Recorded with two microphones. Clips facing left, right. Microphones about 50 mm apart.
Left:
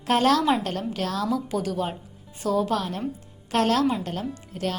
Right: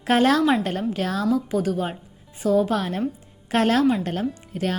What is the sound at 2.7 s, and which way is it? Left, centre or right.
A woman's voice, right.